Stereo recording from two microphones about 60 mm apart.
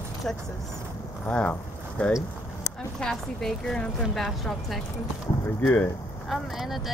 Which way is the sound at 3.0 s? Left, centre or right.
Centre.